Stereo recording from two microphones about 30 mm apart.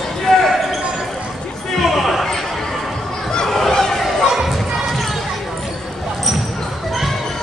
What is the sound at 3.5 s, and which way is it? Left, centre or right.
Chatter, centre.